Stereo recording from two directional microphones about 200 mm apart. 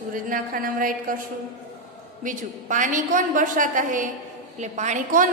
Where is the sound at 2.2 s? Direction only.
40° right (ahead or behind).